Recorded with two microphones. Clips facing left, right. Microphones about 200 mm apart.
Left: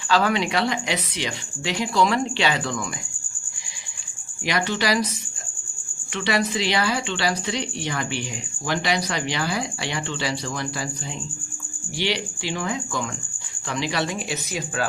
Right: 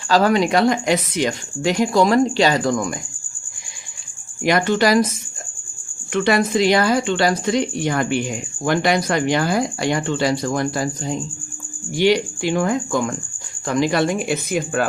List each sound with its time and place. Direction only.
0.1 s speech: 40° right (ahead or behind)
4.4 s speech: 50° right (ahead or behind)
6.1 s speech: 50° right (ahead or behind)